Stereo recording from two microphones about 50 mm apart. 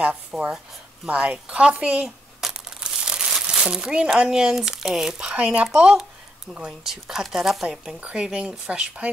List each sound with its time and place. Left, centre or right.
0.3 s speech: centre
2.0 s crumpling: centre
3.4 s speech: centre
8.0 s speech: right